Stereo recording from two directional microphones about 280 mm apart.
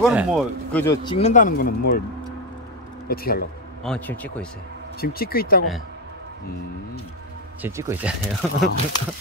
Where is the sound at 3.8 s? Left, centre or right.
Centre.